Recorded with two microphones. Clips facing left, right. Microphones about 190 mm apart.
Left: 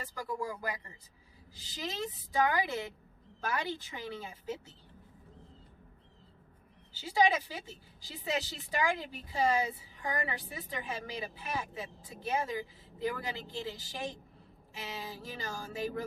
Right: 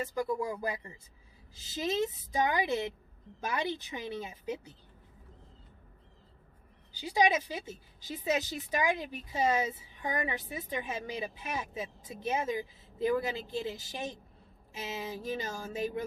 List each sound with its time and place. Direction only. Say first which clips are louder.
0.0 s a woman's voice: right 6 dB; 25° right (ahead or behind)
6.9 s a woman's voice: right 1 dB; 15° right (ahead or behind)